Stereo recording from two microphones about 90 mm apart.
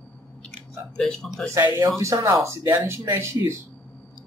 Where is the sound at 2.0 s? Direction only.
35° right (ahead or behind).